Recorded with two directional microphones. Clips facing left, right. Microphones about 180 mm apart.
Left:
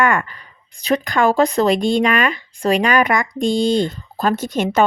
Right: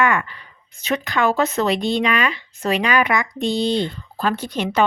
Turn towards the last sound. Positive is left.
turn(degrees=45)  # may be behind; listen again after turning